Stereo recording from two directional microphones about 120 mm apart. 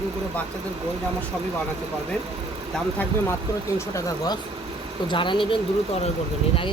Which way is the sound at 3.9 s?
35° left (ahead or behind).